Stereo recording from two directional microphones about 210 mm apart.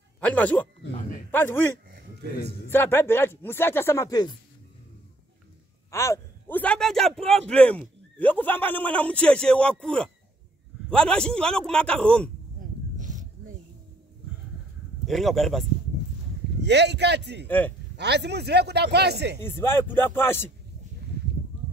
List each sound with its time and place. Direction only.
0.2 s speech: 5° left (ahead or behind)
5.9 s a man's voice: 15° left (ahead or behind)
12.9 s a sound: 35° right (ahead or behind)
15.0 s a man's voice: centre (ahead or behind)
16.6 s a man's voice: 55° right (ahead or behind)
17.5 s speech: 10° left (ahead or behind)
17.9 s a man's voice: 55° right (ahead or behind)
19.4 s speech: 10° left (ahead or behind)